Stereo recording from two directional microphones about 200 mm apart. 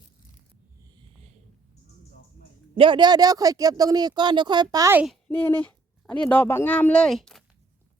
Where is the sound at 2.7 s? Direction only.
25° right (ahead or behind).